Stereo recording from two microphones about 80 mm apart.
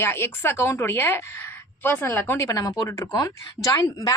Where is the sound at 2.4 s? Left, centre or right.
Left.